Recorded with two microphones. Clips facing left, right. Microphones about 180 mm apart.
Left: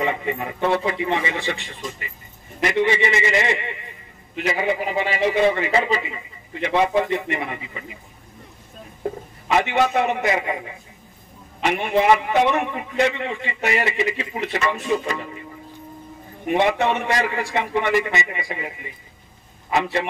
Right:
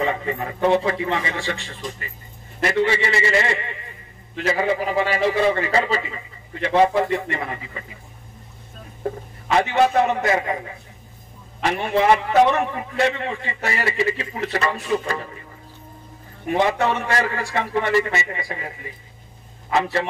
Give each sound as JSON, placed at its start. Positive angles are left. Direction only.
{"t": 0.0, "sound": "a man's voice", "side_deg": 20}
{"t": 0.6, "sound": "a man's voice", "side_deg": -20}
{"t": 0.8, "sound": "a man's voice", "side_deg": 20}
{"t": 9.9, "sound": "a man's voice", "side_deg": 20}
{"t": 16.4, "sound": "a man's voice", "side_deg": 20}